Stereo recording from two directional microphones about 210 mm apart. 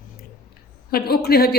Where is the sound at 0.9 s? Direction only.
45° left (ahead or behind).